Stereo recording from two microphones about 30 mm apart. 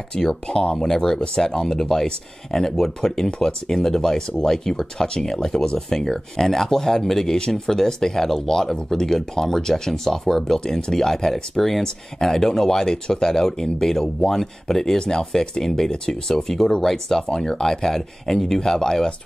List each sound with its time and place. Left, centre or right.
0.1 s speech: left
0.7 s speech: centre
7.3 s speech: left
7.6 s speech: centre
15.0 s speech: left
15.3 s speech: centre